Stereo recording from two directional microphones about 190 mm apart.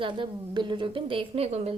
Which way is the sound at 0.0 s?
25° right (ahead or behind).